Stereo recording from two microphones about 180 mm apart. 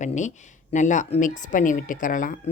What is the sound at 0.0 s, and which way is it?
Speech, 40° left (ahead or behind).